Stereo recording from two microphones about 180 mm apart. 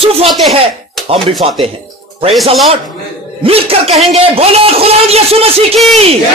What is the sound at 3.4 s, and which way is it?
A man's voice, 30° right (ahead or behind).